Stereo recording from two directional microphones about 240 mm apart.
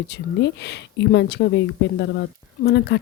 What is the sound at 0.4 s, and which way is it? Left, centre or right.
Speech, left.